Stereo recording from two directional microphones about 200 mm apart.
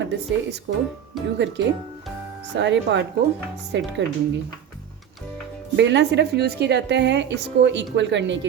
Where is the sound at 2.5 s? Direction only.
65° right (ahead or behind).